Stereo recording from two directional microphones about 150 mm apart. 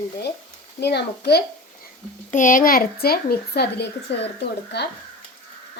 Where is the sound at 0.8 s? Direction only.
90° left.